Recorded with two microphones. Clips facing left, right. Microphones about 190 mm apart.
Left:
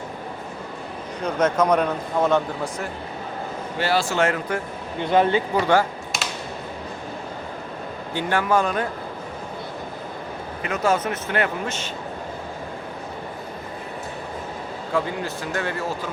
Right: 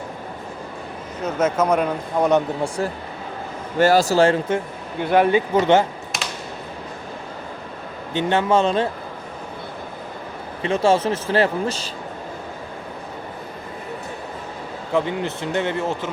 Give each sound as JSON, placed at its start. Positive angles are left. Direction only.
{"t": 1.2, "sound": "a man's voice", "side_deg": -5}
{"t": 3.8, "sound": "speech", "side_deg": -45}
{"t": 5.1, "sound": "a man's voice", "side_deg": -15}
{"t": 6.1, "sound": "a sound", "side_deg": 0}
{"t": 8.1, "sound": "a man's voice", "side_deg": -25}
{"t": 10.6, "sound": "a man's voice", "side_deg": -30}
{"t": 14.9, "sound": "a man's voice", "side_deg": -25}